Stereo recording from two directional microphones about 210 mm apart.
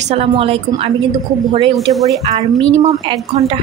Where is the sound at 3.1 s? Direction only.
25° right (ahead or behind).